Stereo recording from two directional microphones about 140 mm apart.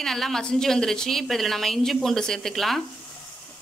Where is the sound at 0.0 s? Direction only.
5° left (ahead or behind).